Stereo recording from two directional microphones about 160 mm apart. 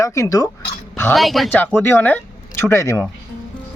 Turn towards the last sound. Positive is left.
turn(degrees=15)  # may be behind; listen again after turning